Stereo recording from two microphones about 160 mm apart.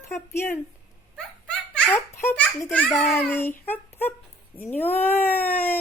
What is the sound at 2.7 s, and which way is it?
Speech, 10° left (ahead or behind).